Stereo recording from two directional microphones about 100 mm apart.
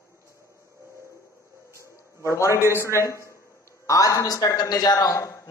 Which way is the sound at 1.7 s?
30° right (ahead or behind).